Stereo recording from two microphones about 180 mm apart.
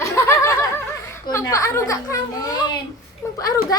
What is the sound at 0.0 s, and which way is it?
Snicker, 15° left (ahead or behind).